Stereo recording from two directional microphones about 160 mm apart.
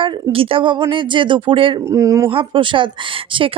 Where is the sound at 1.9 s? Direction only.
20° right (ahead or behind).